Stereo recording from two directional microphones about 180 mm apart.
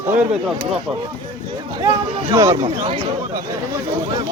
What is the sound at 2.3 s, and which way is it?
Speech, 20° right (ahead or behind).